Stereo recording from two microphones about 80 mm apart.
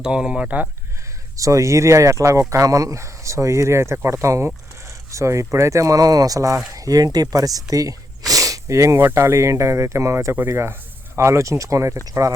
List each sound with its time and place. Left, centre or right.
0.0 s speech: centre
1.4 s speech: right